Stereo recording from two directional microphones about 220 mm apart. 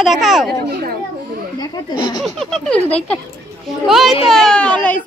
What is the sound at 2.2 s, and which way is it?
A child's voice, centre (ahead or behind).